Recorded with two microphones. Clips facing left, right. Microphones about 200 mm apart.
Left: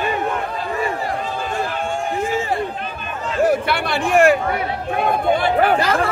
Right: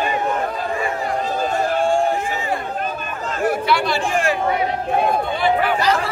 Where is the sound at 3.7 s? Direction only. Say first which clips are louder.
Even; 60° left (ahead or behind).